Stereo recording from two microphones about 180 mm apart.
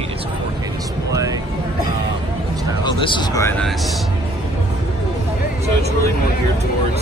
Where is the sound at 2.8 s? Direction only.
25° left (ahead or behind).